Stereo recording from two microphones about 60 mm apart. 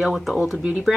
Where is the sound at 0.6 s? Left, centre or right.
Centre.